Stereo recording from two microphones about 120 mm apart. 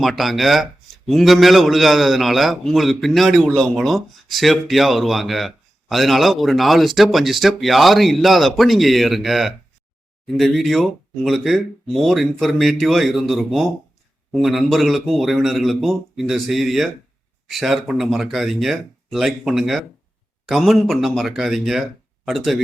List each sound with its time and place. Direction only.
0.0 s a man's voice: centre (ahead or behind)